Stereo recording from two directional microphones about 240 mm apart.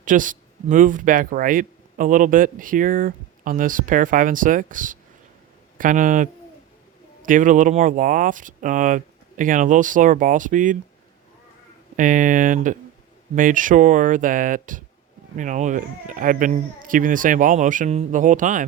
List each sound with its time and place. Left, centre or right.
0.0 s speech: right
11.9 s speech: right